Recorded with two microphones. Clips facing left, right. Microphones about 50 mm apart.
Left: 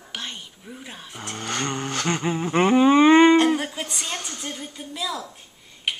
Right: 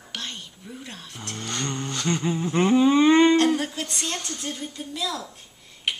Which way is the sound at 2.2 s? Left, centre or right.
Left.